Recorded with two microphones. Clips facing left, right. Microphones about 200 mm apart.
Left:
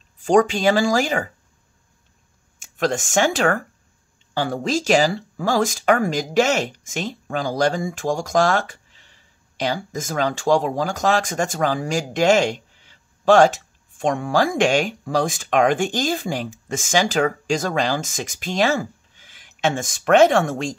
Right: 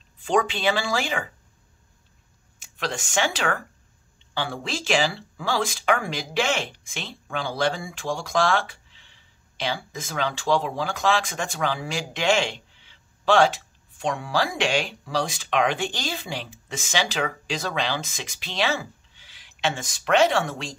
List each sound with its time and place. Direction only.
0.2 s speech: 45° left (ahead or behind)
2.6 s speech: 45° left (ahead or behind)